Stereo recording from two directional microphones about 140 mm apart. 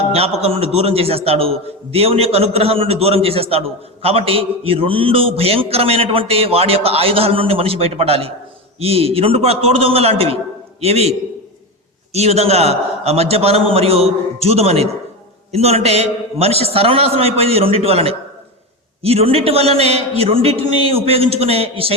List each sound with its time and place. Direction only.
0.0 s a man's voice: 45° right (ahead or behind)
12.1 s a man's voice: 50° right (ahead or behind)